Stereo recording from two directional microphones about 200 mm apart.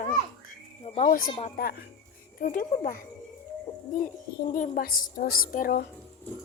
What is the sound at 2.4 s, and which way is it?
Speech, 40° left (ahead or behind).